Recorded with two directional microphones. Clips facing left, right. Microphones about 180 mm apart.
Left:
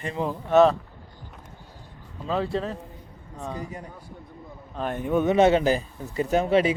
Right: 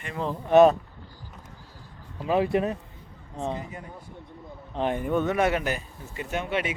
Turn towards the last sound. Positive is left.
turn(degrees=35)  # may be behind; listen again after turning